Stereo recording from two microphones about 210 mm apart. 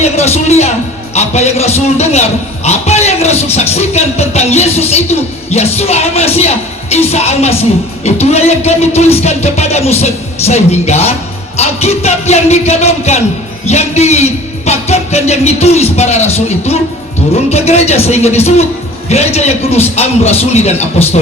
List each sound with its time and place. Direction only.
0.0 s a man's voice: 30° left (ahead or behind)